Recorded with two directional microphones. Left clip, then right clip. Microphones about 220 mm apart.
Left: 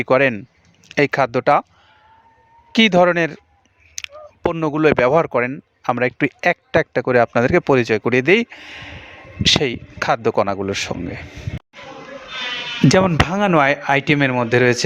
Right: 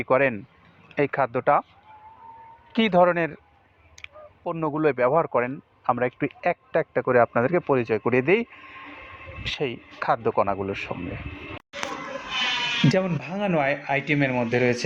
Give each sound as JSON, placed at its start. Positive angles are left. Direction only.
{"t": 0.0, "sound": "speech", "side_deg": 50}
{"t": 2.7, "sound": "speech", "side_deg": 55}
{"t": 4.0, "sound": "a sound", "side_deg": 50}
{"t": 4.5, "sound": "speech", "side_deg": 50}
{"t": 12.9, "sound": "speech", "side_deg": 50}